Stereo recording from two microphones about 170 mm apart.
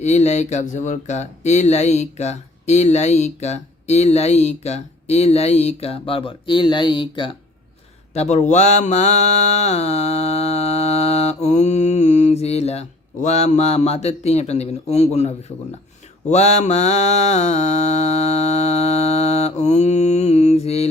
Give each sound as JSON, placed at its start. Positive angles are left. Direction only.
{"t": 0.0, "sound": "speech", "side_deg": 40}
{"t": 8.1, "sound": "speech", "side_deg": 40}
{"t": 16.3, "sound": "speech", "side_deg": 40}